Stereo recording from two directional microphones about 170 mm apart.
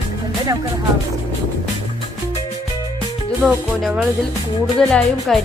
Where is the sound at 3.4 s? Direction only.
Centre (ahead or behind).